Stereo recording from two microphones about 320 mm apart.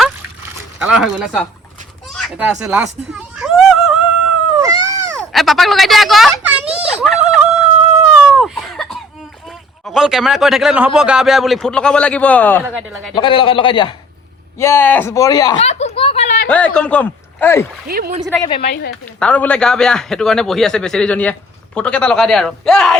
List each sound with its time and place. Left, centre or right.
0.8 s a man's voice: centre
2.0 s children playing: centre
5.3 s a sound: centre
9.5 s a man's voice: centre
12.6 s speech: centre
13.1 s a man's voice: centre
14.6 s a sound: centre
16.5 s speech: centre
17.8 s speech: right
18.6 s speech: left
19.2 s a man's voice: centre